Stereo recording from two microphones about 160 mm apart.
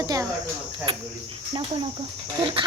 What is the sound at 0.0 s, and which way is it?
Cricket, 25° right (ahead or behind).